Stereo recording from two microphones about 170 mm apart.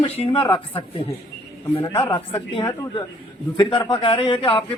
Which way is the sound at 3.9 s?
30° left (ahead or behind).